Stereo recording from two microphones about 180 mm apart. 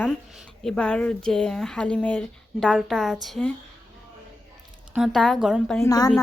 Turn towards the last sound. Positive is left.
turn(degrees=20)  # may be behind; listen again after turning